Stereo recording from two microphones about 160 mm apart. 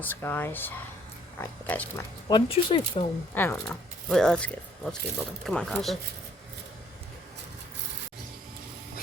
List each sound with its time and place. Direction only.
0.0 s speech: 10° left (ahead or behind)
2.3 s speech: 30° left (ahead or behind)
3.3 s speech: 10° left (ahead or behind)